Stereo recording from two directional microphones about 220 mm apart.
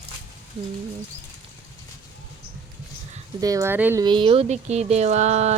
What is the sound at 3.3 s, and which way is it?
Speech, 15° right (ahead or behind).